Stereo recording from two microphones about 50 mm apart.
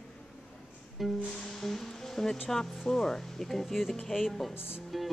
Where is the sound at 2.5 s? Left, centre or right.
Centre.